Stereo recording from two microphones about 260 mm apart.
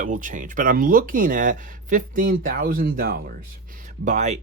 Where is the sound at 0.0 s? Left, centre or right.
Right.